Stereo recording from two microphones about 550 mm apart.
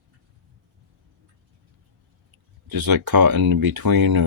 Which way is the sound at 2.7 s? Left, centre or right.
Right.